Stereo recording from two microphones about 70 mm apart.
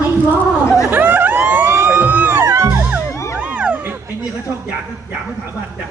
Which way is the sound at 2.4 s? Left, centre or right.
Right.